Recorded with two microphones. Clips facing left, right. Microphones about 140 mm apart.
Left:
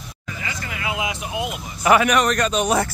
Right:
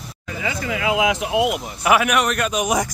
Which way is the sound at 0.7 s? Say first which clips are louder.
Right 7 dB; 90° right.